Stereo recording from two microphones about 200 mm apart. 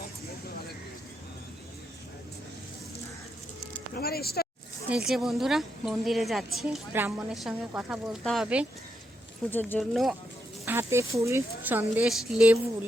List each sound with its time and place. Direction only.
3.9 s speech: 50° left (ahead or behind)
4.9 s a woman's voice: 5° right (ahead or behind)
9.5 s speech: 10° left (ahead or behind)
10.7 s speech: 15° right (ahead or behind)